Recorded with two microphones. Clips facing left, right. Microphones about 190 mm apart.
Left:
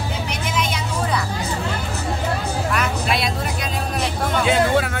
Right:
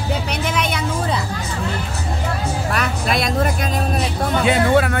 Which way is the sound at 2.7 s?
40° right (ahead or behind).